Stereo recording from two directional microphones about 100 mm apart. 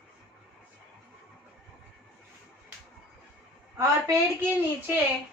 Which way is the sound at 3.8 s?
25° right (ahead or behind).